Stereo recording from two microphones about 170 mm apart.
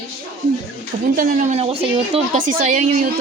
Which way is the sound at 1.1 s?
50° right (ahead or behind).